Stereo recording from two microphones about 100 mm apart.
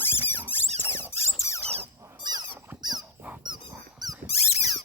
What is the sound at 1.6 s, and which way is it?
Squeak, 90° right.